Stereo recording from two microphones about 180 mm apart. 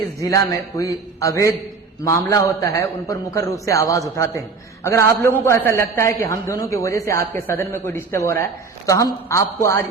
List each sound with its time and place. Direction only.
0.2 s speech: 15° left (ahead or behind)